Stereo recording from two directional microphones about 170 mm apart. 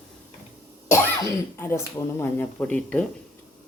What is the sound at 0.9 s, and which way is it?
Speech, 15° left (ahead or behind).